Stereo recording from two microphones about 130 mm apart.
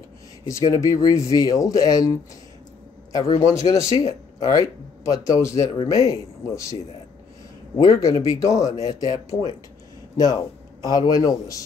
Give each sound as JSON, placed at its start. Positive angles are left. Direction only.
{"t": 0.5, "sound": "a man's voice", "side_deg": 25}
{"t": 10.8, "sound": "speech", "side_deg": 30}